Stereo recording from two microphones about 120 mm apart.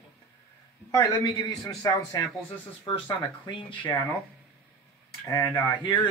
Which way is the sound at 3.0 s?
45° left (ahead or behind).